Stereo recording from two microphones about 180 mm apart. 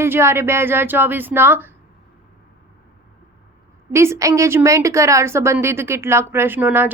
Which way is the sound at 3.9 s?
15° right (ahead or behind).